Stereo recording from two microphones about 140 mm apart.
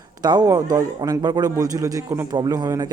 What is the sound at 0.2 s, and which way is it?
A man's voice, 30° right (ahead or behind).